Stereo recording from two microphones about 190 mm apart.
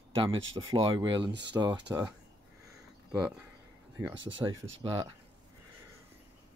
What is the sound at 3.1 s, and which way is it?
Speech, 5° right (ahead or behind).